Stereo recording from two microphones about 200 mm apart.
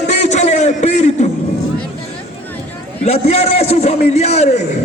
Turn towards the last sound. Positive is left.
turn(degrees=35)  # may be behind; listen again after turning